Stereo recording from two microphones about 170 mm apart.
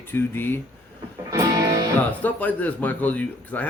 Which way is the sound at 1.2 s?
20° right (ahead or behind).